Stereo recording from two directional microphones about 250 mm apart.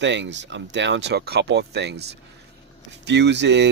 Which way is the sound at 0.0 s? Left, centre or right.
Right.